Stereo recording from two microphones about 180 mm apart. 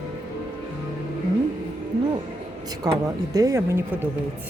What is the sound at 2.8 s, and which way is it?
Speech, 20° right (ahead or behind).